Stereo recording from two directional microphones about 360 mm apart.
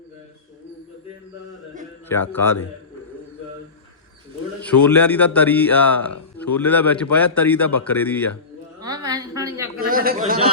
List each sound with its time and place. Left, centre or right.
2.3 s a man's voice: centre
4.8 s a man's voice: centre
8.8 s a sound: centre
9.8 s speech: right